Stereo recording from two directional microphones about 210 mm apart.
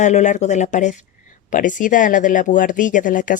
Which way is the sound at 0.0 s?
35° left (ahead or behind).